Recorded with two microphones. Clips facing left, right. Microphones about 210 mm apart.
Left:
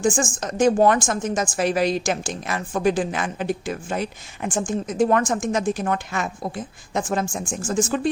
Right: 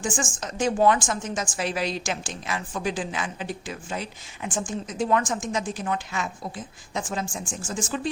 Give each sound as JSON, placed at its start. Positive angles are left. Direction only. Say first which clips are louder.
{"t": 0.0, "sound": "a woman's voice", "louder": "left 7 dB", "side_deg": 45}